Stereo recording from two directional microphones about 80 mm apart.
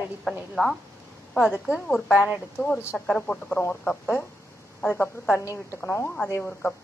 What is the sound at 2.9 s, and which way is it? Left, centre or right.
Speech, centre.